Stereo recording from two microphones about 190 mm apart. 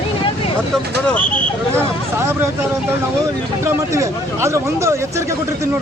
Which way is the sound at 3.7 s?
15° right (ahead or behind).